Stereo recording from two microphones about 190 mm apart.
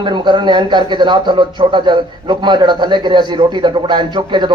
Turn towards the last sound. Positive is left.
turn(degrees=-25)  # may be behind; listen again after turning